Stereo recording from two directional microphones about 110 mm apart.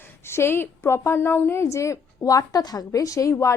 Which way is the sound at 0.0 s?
20° left (ahead or behind).